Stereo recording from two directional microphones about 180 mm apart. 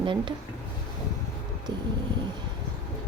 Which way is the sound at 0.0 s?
25° right (ahead or behind).